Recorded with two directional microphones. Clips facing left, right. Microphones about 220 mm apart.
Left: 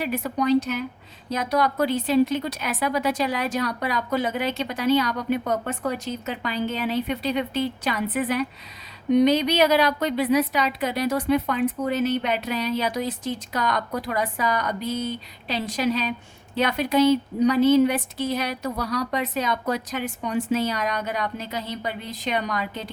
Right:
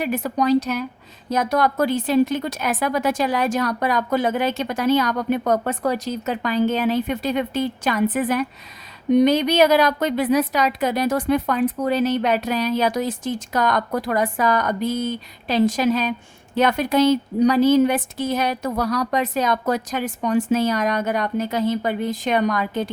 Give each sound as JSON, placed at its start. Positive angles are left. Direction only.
{"t": 0.0, "sound": "a woman's voice", "side_deg": -45}
{"t": 6.2, "sound": "a woman's voice", "side_deg": -45}